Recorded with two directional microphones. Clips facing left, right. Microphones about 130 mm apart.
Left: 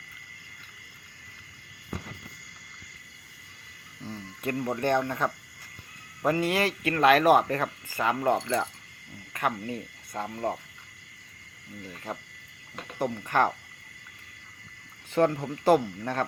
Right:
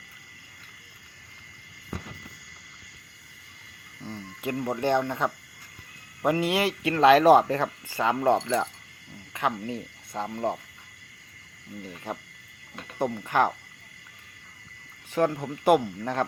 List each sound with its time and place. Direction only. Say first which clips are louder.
4.0 s speech: even; 10° right (ahead or behind)
9.3 s speech: right 1 dB; 15° right (ahead or behind)
11.8 s speech: right 2 dB; 20° right (ahead or behind)
15.1 s speech: left 1 dB; 10° right (ahead or behind)